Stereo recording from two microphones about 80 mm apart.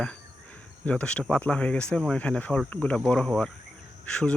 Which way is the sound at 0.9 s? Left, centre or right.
Centre.